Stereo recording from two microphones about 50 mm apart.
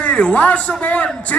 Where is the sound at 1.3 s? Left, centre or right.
Centre.